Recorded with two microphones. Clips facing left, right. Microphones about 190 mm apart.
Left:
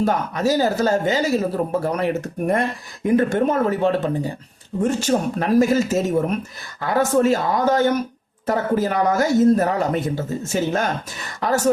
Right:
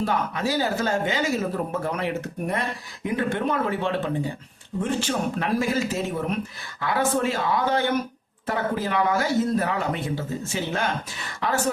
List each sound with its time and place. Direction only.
0.0 s a woman's voice: 40° left (ahead or behind)